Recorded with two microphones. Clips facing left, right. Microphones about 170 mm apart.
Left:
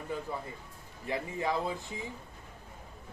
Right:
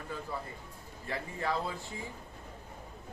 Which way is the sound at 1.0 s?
15° left (ahead or behind).